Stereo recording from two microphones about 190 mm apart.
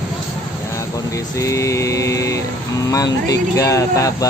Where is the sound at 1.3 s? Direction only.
15° left (ahead or behind).